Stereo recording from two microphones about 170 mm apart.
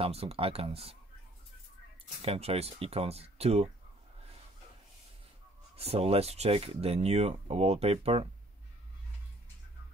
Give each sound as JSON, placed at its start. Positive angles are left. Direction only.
{"t": 0.0, "sound": "speech", "side_deg": -35}
{"t": 2.2, "sound": "speech", "side_deg": -35}
{"t": 5.8, "sound": "speech", "side_deg": -35}